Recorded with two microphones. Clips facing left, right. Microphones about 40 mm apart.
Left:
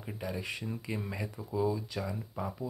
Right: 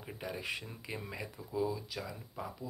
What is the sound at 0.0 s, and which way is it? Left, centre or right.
Speech, centre.